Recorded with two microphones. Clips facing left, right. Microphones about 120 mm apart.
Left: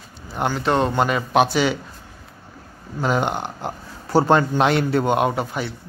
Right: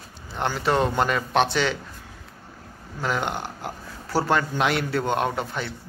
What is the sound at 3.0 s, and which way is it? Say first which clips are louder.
Speech: left 5 dB; 20° left (ahead or behind).